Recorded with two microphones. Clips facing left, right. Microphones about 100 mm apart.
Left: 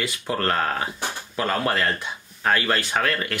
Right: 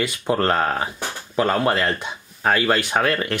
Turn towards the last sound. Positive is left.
turn(degrees=-25)  # may be behind; listen again after turning